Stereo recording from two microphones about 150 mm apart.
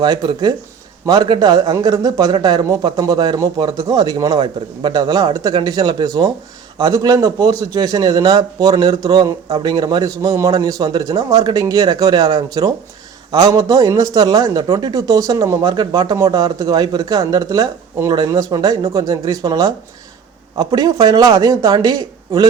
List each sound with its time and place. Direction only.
0.0 s a man's voice: 25° right (ahead or behind)